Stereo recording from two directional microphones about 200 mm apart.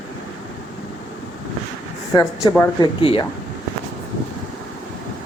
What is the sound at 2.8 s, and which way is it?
Speech, 25° left (ahead or behind).